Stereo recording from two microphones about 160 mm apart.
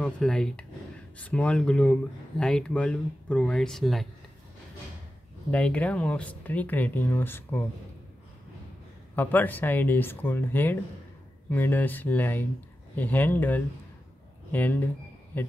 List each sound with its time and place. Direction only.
0.0 s speech: 5° left (ahead or behind)
5.5 s speech: 5° left (ahead or behind)
9.1 s speech: 10° left (ahead or behind)